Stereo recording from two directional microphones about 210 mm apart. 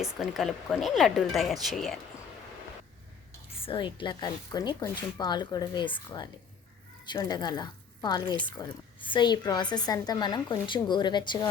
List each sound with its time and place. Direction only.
0.0 s speech: centre (ahead or behind)
3.6 s a woman's voice: 25° left (ahead or behind)